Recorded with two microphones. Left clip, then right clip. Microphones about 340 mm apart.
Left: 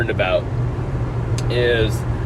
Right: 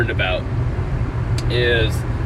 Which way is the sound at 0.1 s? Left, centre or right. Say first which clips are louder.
Left 2 dB; centre.